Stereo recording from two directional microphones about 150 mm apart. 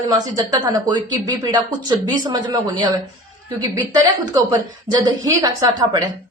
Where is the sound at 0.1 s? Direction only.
25° right (ahead or behind).